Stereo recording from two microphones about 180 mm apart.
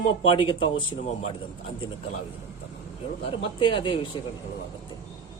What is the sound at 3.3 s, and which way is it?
Speech, 30° left (ahead or behind).